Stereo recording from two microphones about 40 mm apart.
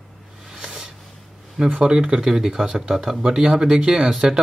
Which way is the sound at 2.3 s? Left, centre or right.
Centre.